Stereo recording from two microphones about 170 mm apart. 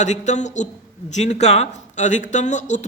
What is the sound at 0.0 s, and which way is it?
Speech, 45° left (ahead or behind).